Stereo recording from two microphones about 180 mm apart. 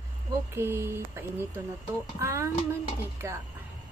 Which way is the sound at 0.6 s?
15° right (ahead or behind).